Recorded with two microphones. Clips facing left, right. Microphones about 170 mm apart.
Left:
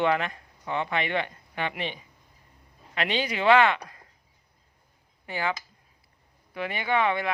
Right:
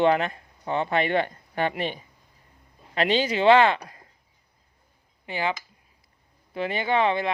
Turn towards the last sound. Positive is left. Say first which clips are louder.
# right 3 dB
turn(degrees=-25)  # may be behind; listen again after turning